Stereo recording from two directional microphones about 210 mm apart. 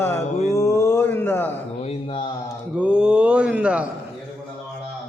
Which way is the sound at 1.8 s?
25° left (ahead or behind).